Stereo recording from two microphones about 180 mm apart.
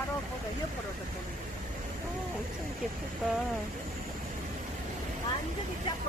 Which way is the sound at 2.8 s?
5° right (ahead or behind).